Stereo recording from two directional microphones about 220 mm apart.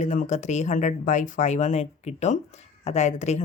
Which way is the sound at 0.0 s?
35° left (ahead or behind).